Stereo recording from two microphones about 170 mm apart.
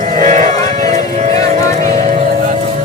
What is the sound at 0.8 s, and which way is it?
Music, 45° right (ahead or behind).